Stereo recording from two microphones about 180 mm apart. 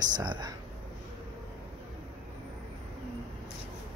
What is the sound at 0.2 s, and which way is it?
Speech, 25° right (ahead or behind).